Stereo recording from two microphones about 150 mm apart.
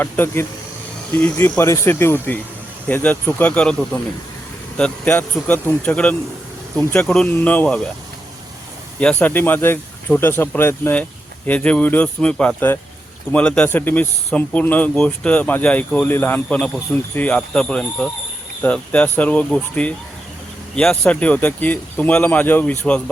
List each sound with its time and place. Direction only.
0.0 s speech: 15° left (ahead or behind)
9.0 s speech: 10° left (ahead or behind)